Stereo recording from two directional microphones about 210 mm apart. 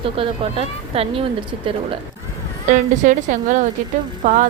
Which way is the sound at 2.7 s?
35° right (ahead or behind).